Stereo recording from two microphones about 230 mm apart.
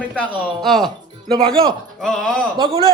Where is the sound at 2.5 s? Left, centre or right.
Right.